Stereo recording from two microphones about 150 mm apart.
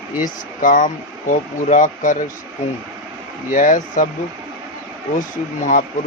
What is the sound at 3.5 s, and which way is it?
Speech, 65° left (ahead or behind).